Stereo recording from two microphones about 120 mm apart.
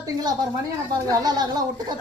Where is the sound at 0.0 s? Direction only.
35° right (ahead or behind).